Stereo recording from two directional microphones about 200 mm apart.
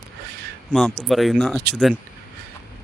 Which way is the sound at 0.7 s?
Centre (ahead or behind).